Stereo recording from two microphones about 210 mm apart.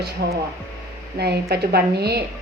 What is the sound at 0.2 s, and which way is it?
A woman's voice, 50° right (ahead or behind).